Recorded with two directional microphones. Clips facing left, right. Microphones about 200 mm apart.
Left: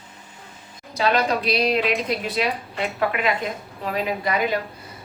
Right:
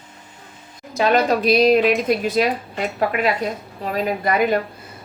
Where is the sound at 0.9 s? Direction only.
45° right (ahead or behind).